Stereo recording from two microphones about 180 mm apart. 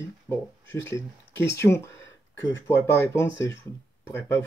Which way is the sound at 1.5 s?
15° left (ahead or behind).